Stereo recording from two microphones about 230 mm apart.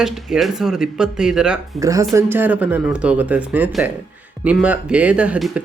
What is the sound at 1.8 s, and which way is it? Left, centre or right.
Speech, centre.